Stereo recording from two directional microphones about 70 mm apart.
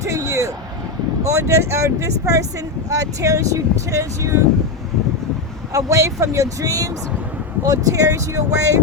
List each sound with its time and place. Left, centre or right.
0.0 s vehicle: right
1.3 s speech: right
5.7 s speech: right